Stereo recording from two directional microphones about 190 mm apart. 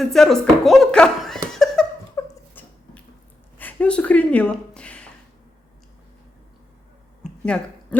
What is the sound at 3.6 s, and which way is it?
Speech, 10° left (ahead or behind).